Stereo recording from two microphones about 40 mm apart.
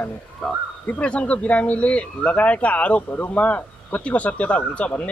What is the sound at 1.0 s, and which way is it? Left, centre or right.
Speech, left.